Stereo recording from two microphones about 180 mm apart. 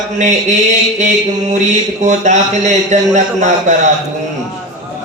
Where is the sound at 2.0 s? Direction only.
40° right (ahead or behind).